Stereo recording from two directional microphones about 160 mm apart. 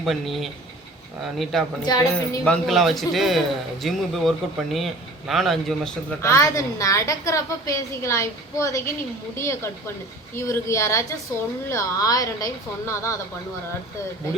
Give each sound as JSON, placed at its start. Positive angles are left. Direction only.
{"t": 0.0, "sound": "a man's voice", "side_deg": 0}
{"t": 1.8, "sound": "a woman's voice", "side_deg": 25}
{"t": 2.4, "sound": "a man's voice", "side_deg": 5}
{"t": 6.2, "sound": "a woman's voice", "side_deg": 20}